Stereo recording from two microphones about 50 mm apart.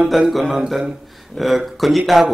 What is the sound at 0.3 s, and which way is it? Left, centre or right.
Speech, centre.